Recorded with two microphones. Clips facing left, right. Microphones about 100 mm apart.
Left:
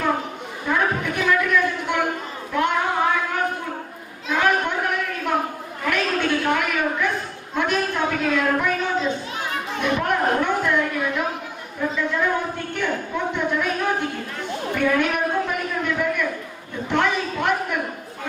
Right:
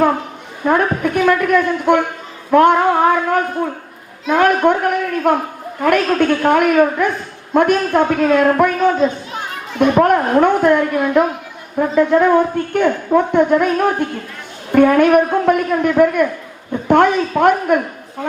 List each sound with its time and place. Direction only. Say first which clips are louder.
0.6 s a woman's voice: right 7 dB; 50° right (ahead or behind)
2.5 s a sound: right 11 dB; 50° right (ahead or behind)
4.3 s a woman's voice: right 8 dB; 50° right (ahead or behind)